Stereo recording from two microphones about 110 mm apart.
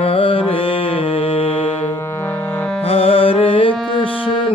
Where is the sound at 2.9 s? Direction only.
60° left (ahead or behind).